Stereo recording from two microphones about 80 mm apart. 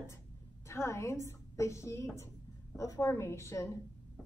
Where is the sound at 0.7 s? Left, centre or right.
Left.